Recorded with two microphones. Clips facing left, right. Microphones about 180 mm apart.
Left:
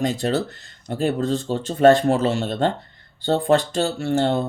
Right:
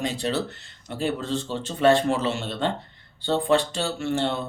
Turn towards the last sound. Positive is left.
turn(degrees=40)  # may be behind; listen again after turning